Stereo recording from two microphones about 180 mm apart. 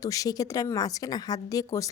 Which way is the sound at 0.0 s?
20° left (ahead or behind).